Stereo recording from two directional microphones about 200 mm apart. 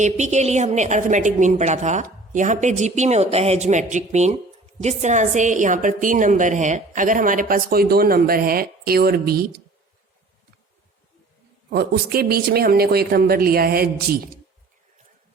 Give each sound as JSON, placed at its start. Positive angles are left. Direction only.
{"t": 0.0, "sound": "a woman's voice", "side_deg": -35}
{"t": 11.7, "sound": "speech", "side_deg": -50}